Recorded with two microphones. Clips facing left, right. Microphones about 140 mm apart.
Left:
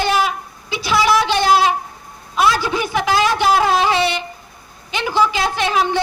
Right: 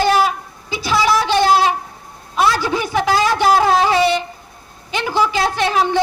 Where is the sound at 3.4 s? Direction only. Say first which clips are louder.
Right 2 dB; 45° right (ahead or behind).